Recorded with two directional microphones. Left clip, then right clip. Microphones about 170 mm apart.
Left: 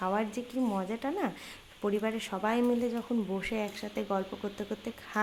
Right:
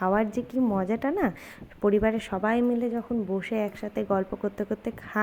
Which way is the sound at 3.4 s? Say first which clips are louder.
Right 5 dB; 20° right (ahead or behind).